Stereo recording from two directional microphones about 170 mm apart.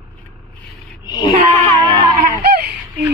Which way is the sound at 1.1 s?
25° left (ahead or behind).